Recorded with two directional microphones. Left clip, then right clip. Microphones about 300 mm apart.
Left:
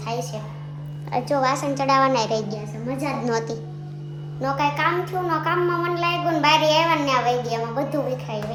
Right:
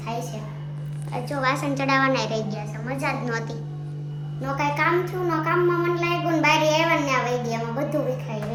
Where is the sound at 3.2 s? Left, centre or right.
Centre.